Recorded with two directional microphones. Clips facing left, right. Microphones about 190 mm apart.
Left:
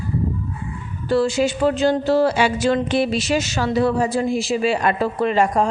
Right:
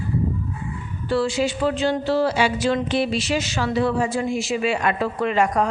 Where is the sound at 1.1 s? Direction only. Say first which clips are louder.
Left 3 dB; 45° left (ahead or behind).